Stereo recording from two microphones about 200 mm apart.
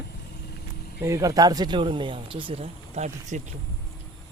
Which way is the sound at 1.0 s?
15° right (ahead or behind).